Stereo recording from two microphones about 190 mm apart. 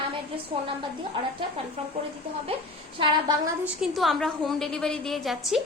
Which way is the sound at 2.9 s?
25° right (ahead or behind).